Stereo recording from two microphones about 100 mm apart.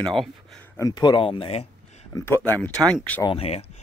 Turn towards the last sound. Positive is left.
turn(degrees=85)